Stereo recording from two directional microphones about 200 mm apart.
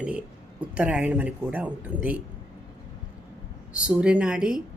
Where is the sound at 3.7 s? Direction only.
5° right (ahead or behind).